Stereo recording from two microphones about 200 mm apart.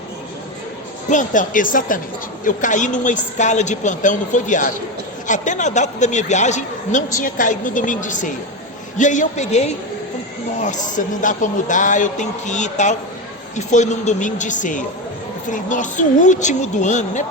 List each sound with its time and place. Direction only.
1.1 s a man's voice: 40° left (ahead or behind)